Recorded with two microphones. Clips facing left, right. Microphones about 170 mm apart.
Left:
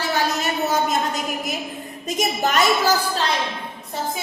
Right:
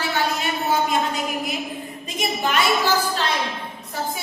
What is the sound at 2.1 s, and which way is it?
Speech, 45° left (ahead or behind).